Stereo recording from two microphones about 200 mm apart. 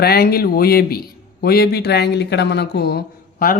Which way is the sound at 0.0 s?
50° left (ahead or behind).